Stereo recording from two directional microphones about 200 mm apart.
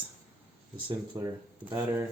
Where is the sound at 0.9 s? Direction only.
20° right (ahead or behind).